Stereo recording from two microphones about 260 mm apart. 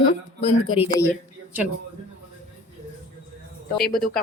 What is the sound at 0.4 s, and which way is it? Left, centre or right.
Speech, left.